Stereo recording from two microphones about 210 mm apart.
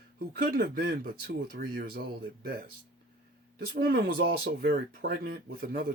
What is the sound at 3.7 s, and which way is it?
Speech, 45° right (ahead or behind).